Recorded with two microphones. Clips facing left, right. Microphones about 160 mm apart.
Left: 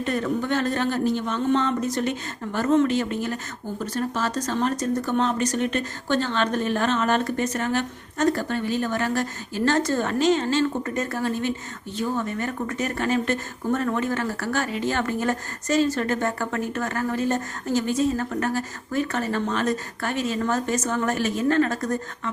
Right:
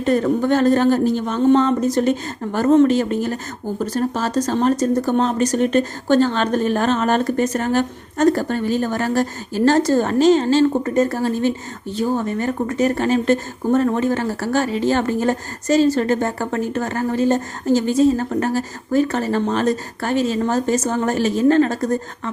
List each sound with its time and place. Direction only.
0.0 s speech: 35° right (ahead or behind)